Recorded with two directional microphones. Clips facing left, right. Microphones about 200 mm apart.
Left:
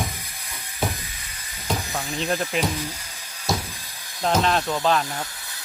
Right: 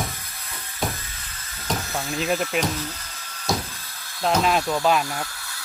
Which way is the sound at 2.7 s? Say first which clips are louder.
Left 1 dB; 15° left (ahead or behind).